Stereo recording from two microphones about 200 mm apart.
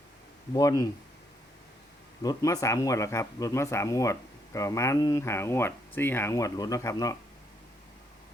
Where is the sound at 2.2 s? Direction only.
20° left (ahead or behind).